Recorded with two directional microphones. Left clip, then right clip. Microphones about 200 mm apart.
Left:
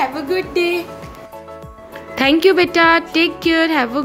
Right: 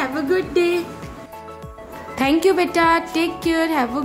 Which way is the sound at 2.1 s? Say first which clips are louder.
Left 4 dB; 15° left (ahead or behind).